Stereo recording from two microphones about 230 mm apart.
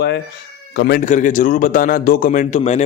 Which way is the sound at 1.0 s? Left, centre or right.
Left.